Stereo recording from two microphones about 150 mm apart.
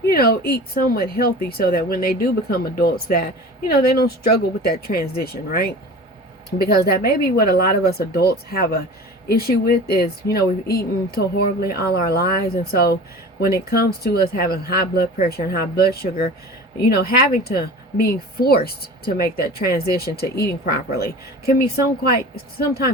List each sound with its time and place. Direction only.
0.1 s speech: 90° left